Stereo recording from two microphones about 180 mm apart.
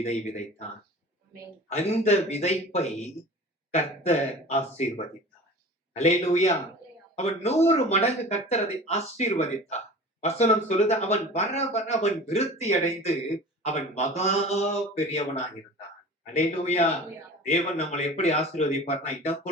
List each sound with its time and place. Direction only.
0.0 s a man's voice: 40° left (ahead or behind)
1.7 s a man's voice: 35° left (ahead or behind)